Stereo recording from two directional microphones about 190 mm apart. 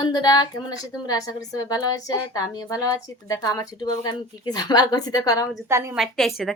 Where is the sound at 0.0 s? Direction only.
20° left (ahead or behind).